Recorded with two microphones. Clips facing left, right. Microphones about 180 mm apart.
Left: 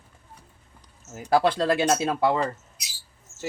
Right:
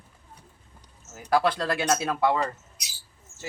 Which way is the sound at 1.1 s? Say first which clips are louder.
Left 2 dB; 30° left (ahead or behind).